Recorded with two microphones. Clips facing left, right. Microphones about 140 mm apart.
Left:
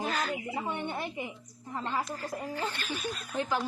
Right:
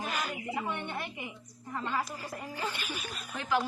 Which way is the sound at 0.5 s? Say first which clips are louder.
Left 1 dB; 20° left (ahead or behind).